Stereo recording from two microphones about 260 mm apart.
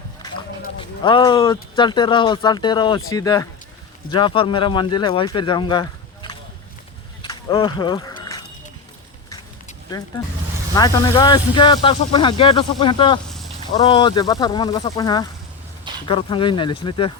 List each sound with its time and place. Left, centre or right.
0.8 s speech: centre
7.2 s a sound: centre
10.8 s speech: centre